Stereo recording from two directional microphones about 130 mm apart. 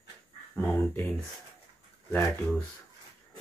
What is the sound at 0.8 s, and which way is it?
Speech, 15° left (ahead or behind).